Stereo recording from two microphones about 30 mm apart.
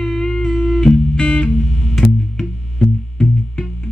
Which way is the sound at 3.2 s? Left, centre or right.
Left.